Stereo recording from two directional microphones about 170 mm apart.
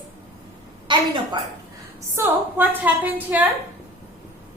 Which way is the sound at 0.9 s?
30° right (ahead or behind).